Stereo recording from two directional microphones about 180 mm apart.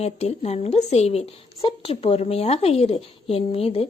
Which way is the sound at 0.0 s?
35° left (ahead or behind).